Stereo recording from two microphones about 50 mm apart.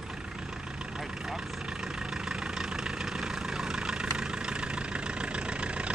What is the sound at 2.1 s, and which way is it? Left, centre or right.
Vehicle, centre.